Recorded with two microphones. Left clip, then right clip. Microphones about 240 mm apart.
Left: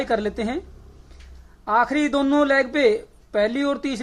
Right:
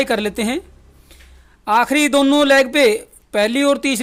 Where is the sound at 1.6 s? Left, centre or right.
Right.